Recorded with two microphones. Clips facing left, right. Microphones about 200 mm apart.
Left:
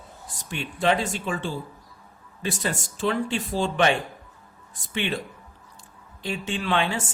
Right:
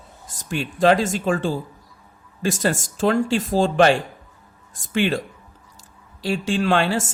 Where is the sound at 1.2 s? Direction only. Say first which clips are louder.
Right 7 dB; 45° right (ahead or behind).